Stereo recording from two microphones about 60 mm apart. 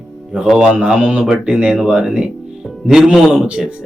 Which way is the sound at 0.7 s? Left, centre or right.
Centre.